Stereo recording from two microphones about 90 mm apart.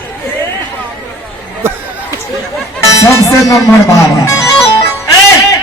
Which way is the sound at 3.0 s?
35° left (ahead or behind).